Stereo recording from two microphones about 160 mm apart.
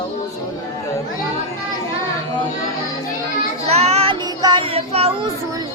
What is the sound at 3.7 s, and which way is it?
Child singing, 40° right (ahead or behind).